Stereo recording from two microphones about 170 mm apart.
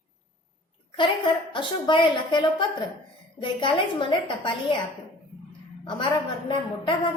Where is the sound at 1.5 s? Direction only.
30° left (ahead or behind).